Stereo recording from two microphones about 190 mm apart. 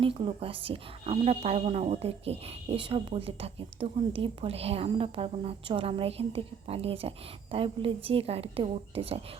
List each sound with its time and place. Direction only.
0.0 s a woman's voice: 30° right (ahead or behind)